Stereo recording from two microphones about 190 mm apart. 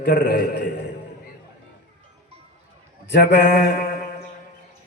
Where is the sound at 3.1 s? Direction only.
60° left (ahead or behind).